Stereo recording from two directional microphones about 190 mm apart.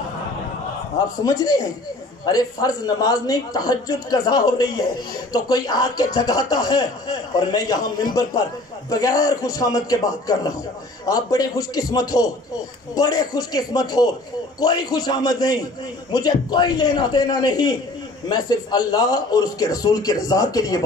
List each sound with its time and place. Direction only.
1.2 s speech: 20° left (ahead or behind)